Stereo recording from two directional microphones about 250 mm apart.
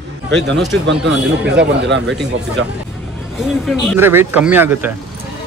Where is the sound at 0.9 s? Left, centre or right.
Right.